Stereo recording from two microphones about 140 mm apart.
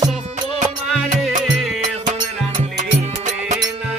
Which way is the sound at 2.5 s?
60° right (ahead or behind).